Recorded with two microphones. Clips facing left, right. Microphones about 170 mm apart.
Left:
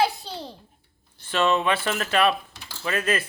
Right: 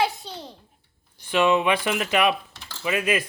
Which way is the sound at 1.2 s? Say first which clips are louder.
Right 2 dB; 15° right (ahead or behind).